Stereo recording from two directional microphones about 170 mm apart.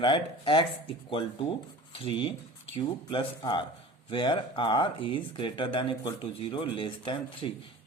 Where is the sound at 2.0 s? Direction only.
30° left (ahead or behind).